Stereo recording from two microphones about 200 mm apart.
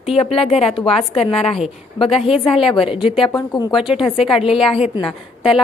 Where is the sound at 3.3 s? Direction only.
20° left (ahead or behind).